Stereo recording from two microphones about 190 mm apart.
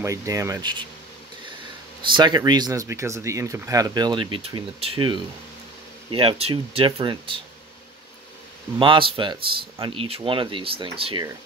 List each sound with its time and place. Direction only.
0.0 s speech: 15° right (ahead or behind)
2.0 s speech: 25° right (ahead or behind)
8.7 s speech: 25° right (ahead or behind)